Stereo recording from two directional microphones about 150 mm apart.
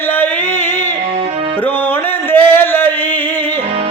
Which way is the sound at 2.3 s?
15° left (ahead or behind).